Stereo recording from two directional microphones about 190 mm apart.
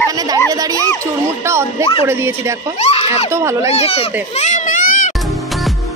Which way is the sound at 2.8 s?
35° left (ahead or behind).